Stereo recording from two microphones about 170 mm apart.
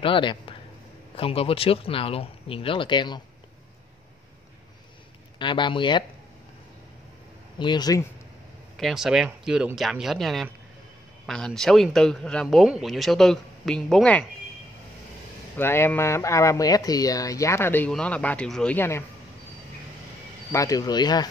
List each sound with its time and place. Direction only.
0.0 s speech: 30° left (ahead or behind)
5.4 s speech: 30° left (ahead or behind)
7.5 s speech: 25° left (ahead or behind)
8.7 s speech: centre (ahead or behind)
15.5 s speech: 15° left (ahead or behind)
20.5 s speech: 20° left (ahead or behind)